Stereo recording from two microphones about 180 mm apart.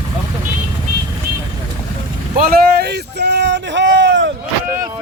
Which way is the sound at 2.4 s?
55° right (ahead or behind).